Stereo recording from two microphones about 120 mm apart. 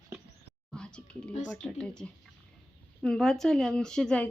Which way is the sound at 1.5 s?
5° left (ahead or behind).